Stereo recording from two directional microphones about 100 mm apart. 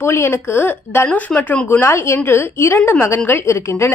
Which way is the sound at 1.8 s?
25° left (ahead or behind).